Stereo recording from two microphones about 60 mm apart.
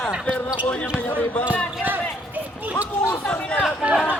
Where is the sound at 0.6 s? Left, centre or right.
Left.